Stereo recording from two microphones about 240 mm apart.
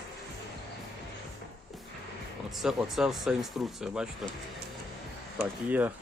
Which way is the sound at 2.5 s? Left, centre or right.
Centre.